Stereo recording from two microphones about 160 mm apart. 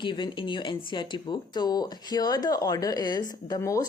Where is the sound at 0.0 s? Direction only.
30° left (ahead or behind).